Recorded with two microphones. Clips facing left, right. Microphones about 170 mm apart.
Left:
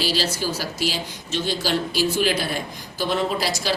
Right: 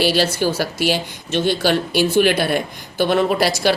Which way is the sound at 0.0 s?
60° right (ahead or behind).